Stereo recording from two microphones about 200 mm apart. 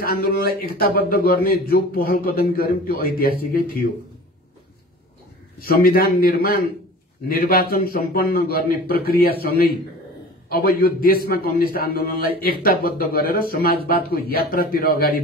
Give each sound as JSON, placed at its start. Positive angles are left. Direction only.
{"t": 0.0, "sound": "a man's voice", "side_deg": 50}
{"t": 5.6, "sound": "a man's voice", "side_deg": 45}